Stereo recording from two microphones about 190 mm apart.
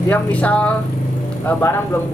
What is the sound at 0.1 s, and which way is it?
Speech, 10° left (ahead or behind).